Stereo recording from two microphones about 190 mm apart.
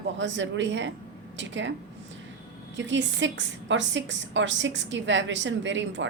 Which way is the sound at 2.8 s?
70° right (ahead or behind).